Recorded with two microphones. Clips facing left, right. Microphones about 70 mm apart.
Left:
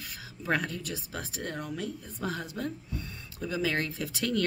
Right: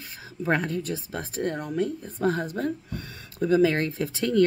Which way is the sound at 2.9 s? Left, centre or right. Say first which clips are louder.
Right 2 dB; right.